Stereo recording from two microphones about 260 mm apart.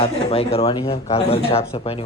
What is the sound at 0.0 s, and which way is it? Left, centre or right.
Speech, left.